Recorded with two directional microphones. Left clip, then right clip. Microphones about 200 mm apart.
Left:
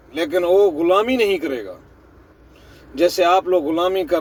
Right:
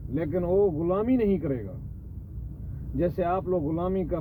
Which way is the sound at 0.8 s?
15° left (ahead or behind).